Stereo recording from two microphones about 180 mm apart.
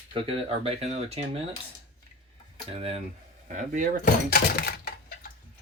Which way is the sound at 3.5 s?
45° right (ahead or behind).